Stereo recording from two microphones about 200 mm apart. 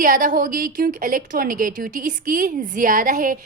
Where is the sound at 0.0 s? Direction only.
45° right (ahead or behind).